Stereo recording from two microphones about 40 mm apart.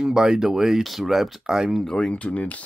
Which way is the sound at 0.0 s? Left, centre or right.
Centre.